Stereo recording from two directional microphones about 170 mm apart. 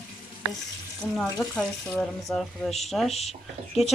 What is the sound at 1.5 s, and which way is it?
Speech, 5° left (ahead or behind).